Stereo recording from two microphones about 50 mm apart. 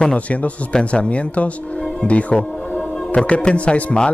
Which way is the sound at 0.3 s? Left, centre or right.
Left.